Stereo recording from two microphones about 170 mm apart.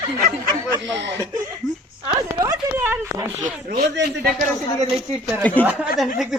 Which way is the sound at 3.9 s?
75° right (ahead or behind).